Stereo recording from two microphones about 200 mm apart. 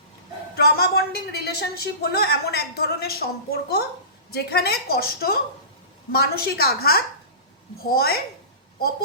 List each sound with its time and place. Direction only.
0.5 s a woman's voice: 50° left (ahead or behind)